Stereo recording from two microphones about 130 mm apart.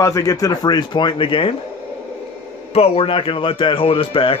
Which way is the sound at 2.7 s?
50° left (ahead or behind).